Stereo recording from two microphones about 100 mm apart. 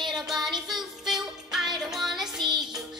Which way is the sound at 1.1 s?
5° right (ahead or behind).